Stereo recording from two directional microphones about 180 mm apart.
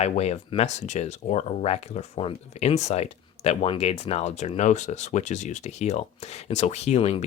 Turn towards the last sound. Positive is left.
turn(degrees=35)  # may be behind; listen again after turning